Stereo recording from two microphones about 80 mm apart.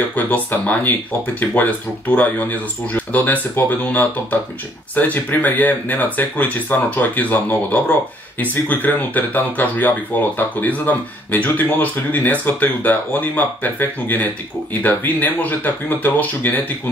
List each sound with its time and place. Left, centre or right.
0.1 s speech: left